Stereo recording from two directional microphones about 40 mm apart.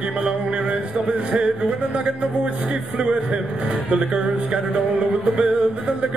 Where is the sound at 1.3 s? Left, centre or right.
Right.